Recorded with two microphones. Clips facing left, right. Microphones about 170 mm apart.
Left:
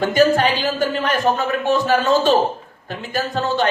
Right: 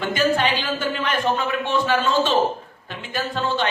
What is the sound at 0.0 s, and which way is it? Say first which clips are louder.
A man's voice: left 5 dB; 40° left (ahead or behind).